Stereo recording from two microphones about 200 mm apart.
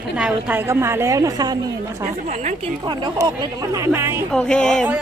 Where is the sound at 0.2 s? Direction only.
5° right (ahead or behind).